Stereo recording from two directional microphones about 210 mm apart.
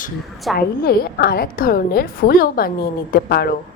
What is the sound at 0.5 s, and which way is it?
A woman's voice, 50° left (ahead or behind).